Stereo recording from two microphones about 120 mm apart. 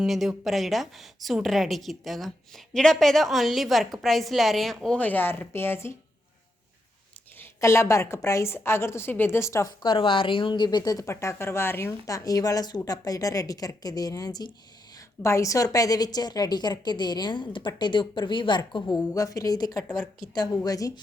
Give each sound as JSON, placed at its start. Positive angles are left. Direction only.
{"t": 0.0, "sound": "a woman's voice", "side_deg": -5}
{"t": 7.3, "sound": "a woman's voice", "side_deg": 25}
{"t": 9.8, "sound": "speech", "side_deg": 45}
{"t": 19.1, "sound": "a woman's voice", "side_deg": 30}